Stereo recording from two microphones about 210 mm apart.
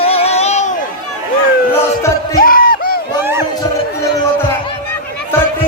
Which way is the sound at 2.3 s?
45° left (ahead or behind).